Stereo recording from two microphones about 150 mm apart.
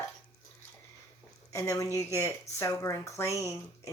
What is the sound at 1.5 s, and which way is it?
Speech, 20° left (ahead or behind).